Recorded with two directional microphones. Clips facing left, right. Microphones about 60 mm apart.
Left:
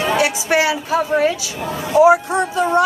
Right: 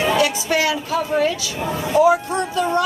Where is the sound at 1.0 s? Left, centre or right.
Left.